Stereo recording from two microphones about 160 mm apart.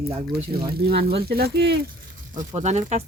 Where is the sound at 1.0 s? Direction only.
75° right (ahead or behind); by 1.8 s 90° right.